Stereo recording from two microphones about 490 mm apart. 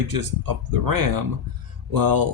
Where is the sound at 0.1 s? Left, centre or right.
Right.